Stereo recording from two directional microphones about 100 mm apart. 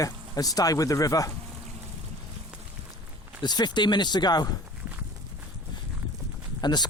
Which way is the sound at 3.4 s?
45° left (ahead or behind).